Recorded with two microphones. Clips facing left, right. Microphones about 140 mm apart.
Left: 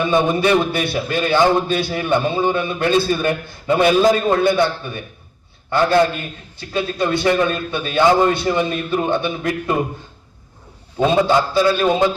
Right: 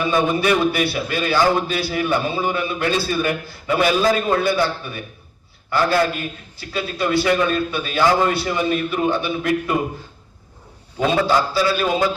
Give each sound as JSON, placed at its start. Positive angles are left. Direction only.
{"t": 0.0, "sound": "a man's voice", "side_deg": 25}
{"t": 10.9, "sound": "a man's voice", "side_deg": 20}